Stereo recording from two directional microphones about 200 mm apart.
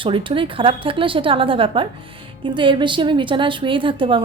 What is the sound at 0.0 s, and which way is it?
A woman's voice, 25° right (ahead or behind).